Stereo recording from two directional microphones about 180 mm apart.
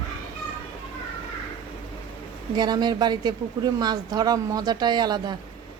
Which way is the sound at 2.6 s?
25° right (ahead or behind).